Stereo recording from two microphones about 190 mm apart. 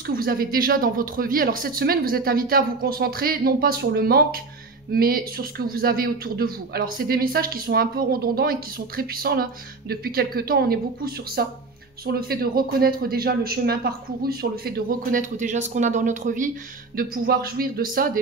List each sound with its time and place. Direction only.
0.0 s a man's voice: 50° right (ahead or behind)